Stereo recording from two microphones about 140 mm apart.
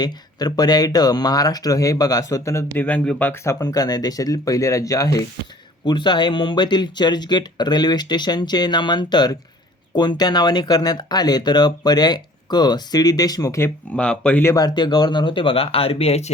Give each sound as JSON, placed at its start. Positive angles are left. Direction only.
{"t": 0.0, "sound": "speech", "side_deg": 30}
{"t": 13.9, "sound": "speech", "side_deg": 10}
{"t": 14.5, "sound": "speech", "side_deg": 30}